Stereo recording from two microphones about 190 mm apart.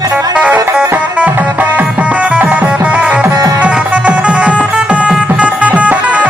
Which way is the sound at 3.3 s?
20° right (ahead or behind).